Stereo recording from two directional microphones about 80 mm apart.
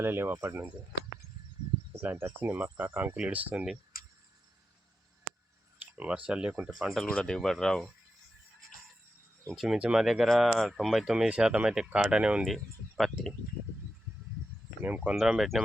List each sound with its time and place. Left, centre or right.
0.0 s speech: right
2.0 s speech: right
5.8 s speech: centre
6.7 s speech: centre
7.0 s speech: centre
9.7 s speech: centre
13.0 s a sound: centre
14.8 s speech: right
15.1 s speech: centre